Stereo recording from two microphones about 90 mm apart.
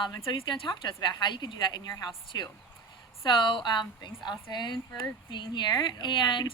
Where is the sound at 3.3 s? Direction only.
60° left (ahead or behind).